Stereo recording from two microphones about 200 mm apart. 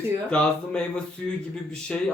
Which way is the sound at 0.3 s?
5° left (ahead or behind).